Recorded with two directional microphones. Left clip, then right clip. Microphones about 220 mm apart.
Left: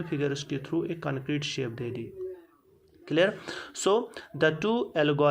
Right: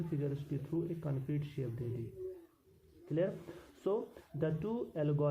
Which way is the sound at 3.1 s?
25° left (ahead or behind).